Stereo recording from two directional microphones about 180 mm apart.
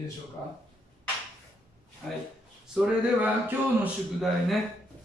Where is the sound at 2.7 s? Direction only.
5° right (ahead or behind).